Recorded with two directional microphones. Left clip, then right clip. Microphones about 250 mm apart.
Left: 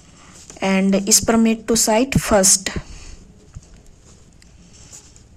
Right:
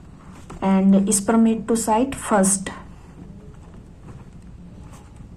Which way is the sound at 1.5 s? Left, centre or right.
Left.